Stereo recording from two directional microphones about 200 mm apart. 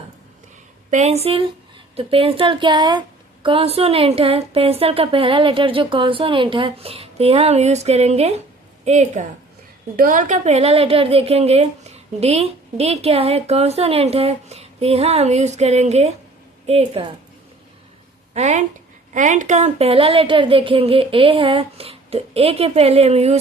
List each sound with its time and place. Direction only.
0.9 s a woman's voice: 35° right (ahead or behind)
18.3 s a woman's voice: 35° right (ahead or behind)